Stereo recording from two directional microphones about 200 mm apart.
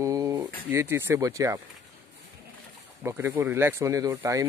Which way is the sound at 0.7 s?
10° right (ahead or behind).